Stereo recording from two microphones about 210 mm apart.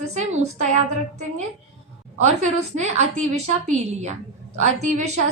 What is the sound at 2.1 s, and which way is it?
A woman's voice, 35° right (ahead or behind).